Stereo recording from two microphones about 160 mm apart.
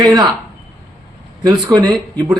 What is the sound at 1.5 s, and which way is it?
Speech, 25° right (ahead or behind).